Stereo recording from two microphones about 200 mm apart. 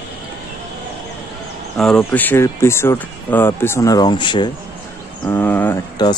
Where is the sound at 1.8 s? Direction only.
5° left (ahead or behind); by 4.5 s 25° left (ahead or behind).